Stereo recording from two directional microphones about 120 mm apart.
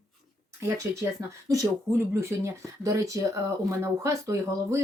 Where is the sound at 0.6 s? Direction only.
25° right (ahead or behind).